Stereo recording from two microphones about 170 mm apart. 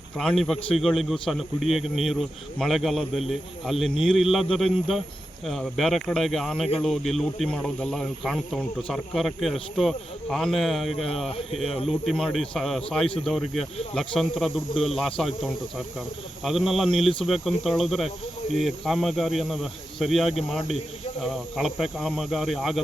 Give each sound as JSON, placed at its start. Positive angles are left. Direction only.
{"t": 0.2, "sound": "a man's voice", "side_deg": 0}
{"t": 11.6, "sound": "speech", "side_deg": 35}
{"t": 12.0, "sound": "a man's voice", "side_deg": 0}
{"t": 16.4, "sound": "a man's voice", "side_deg": 0}